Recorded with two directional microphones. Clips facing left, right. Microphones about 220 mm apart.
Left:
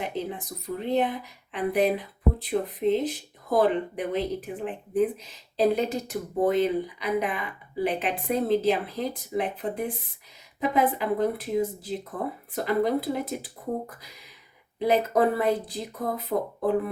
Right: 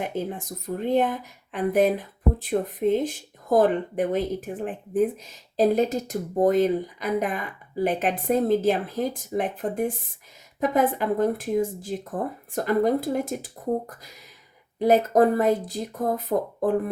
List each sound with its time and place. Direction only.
0.0 s speech: 45° right (ahead or behind)
14.8 s speech: 45° right (ahead or behind)